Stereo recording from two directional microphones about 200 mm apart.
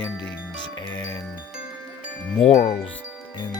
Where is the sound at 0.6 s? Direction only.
20° left (ahead or behind).